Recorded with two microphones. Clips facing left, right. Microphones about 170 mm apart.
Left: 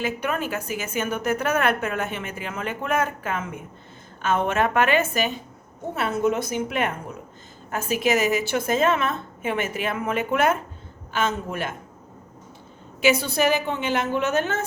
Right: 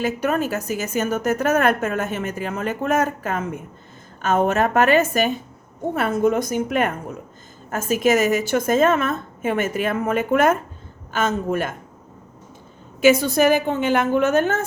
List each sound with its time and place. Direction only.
0.0 s a woman's voice: 40° right (ahead or behind)
13.0 s a woman's voice: 45° right (ahead or behind)